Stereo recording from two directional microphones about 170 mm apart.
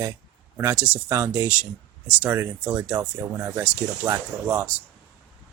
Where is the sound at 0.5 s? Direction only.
20° right (ahead or behind).